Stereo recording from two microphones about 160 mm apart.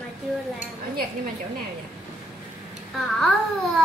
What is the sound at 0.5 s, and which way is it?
Dishes, 60° right (ahead or behind).